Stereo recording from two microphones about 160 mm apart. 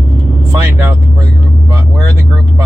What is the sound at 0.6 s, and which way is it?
Speech, 15° right (ahead or behind).